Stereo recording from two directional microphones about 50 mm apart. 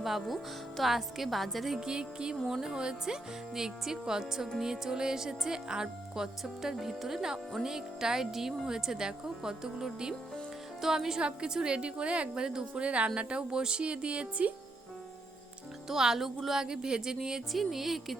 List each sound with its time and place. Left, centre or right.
0.0 s a woman's voice: centre
1.8 s a woman's voice: centre
15.9 s speech: centre
17.5 s a woman's voice: centre